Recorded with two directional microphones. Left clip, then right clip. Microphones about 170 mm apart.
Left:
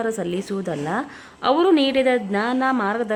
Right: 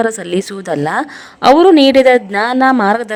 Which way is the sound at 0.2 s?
40° right (ahead or behind).